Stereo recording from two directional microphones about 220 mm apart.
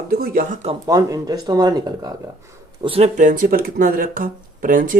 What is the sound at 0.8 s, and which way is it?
Speech, 15° right (ahead or behind).